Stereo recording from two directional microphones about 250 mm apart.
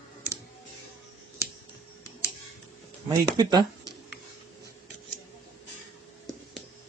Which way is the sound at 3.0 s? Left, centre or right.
Centre.